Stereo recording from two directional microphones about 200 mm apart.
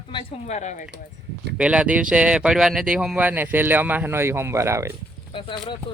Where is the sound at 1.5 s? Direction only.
5° right (ahead or behind).